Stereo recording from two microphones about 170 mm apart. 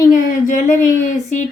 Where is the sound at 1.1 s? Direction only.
45° left (ahead or behind).